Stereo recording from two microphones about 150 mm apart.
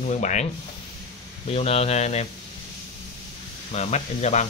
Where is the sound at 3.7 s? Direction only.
50° left (ahead or behind).